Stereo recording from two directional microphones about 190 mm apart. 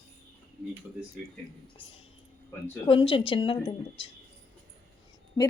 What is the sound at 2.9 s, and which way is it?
Speech, 30° left (ahead or behind).